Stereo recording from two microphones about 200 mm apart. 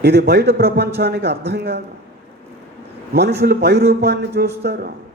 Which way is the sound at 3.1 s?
55° right (ahead or behind).